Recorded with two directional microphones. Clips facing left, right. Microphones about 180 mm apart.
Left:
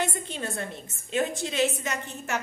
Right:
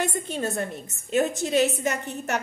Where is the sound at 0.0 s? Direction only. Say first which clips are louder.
Right 4 dB; 45° right (ahead or behind).